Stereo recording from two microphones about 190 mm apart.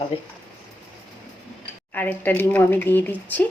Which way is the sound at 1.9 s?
10° left (ahead or behind).